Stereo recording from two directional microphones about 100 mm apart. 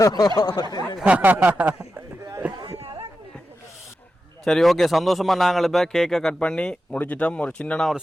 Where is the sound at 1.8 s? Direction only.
30° right (ahead or behind).